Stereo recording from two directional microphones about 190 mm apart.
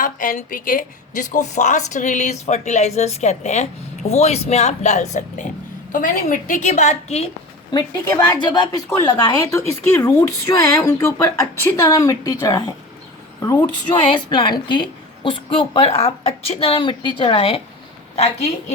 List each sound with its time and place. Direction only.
0.0 s a woman's voice: 45° left (ahead or behind)
7.7 s a woman's voice: 20° left (ahead or behind); by 18.5 s 35° left (ahead or behind)